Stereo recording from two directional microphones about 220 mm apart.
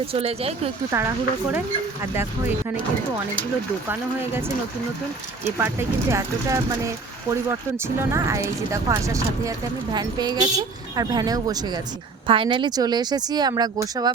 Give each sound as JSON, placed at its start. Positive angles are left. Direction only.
{"t": 0.0, "sound": "speech", "side_deg": -25}
{"t": 0.9, "sound": "speech", "side_deg": -10}
{"t": 5.5, "sound": "speech", "side_deg": -10}